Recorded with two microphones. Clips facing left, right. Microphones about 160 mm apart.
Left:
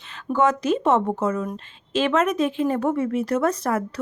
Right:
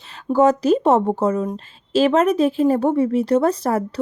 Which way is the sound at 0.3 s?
35° right (ahead or behind).